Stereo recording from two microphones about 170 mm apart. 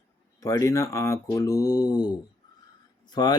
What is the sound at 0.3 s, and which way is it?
Speech, 20° left (ahead or behind).